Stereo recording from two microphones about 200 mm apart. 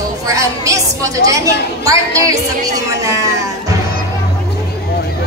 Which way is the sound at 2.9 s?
15° right (ahead or behind).